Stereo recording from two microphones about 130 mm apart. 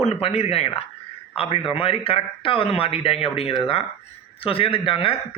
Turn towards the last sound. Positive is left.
turn(degrees=45)  # may be behind; listen again after turning